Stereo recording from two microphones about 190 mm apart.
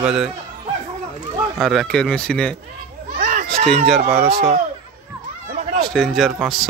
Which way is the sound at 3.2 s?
40° right (ahead or behind).